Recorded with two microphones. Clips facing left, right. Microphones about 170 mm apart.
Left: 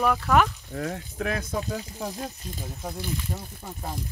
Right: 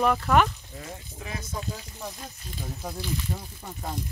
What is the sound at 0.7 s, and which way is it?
Speech, 70° left (ahead or behind).